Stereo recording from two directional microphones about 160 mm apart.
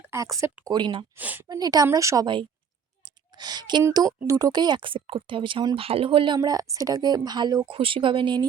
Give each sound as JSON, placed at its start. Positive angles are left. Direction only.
{"t": 0.0, "sound": "speech", "side_deg": -20}
{"t": 1.1, "sound": "a woman's voice", "side_deg": -10}
{"t": 1.5, "sound": "speech", "side_deg": -25}
{"t": 3.0, "sound": "a sound", "side_deg": -25}
{"t": 3.8, "sound": "speech", "side_deg": -20}